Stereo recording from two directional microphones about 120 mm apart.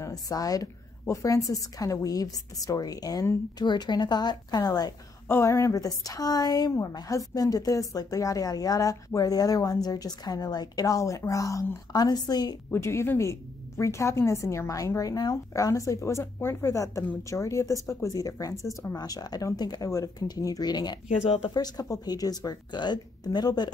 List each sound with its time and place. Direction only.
0.0 s a woman's voice: 30° left (ahead or behind)
12.7 s a woman's voice: 20° left (ahead or behind); by 23.7 s 35° left (ahead or behind)